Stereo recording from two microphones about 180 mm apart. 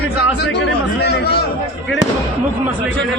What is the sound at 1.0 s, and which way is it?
Speech, 65° left (ahead or behind).